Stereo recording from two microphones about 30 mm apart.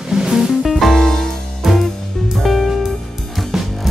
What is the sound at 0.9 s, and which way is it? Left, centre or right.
Music, centre.